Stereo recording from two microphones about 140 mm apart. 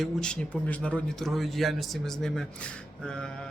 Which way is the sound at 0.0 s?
5° left (ahead or behind).